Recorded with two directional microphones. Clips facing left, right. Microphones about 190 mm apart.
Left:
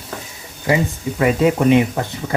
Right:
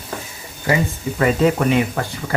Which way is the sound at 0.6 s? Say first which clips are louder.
Left 1 dB; 15° left (ahead or behind).